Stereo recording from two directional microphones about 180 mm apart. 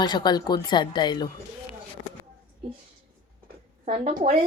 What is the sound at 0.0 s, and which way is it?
A woman's voice, 25° left (ahead or behind).